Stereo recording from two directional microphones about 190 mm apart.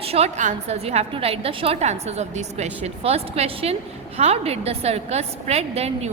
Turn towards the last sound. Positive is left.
turn(degrees=-35)  # may be behind; listen again after turning